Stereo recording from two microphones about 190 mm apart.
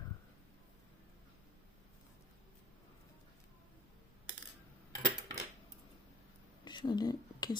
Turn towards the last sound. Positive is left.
turn(degrees=20)  # may be behind; listen again after turning